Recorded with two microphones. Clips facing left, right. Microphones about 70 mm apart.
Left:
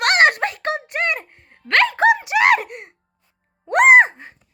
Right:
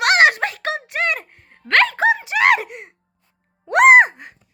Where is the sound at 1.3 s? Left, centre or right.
Centre.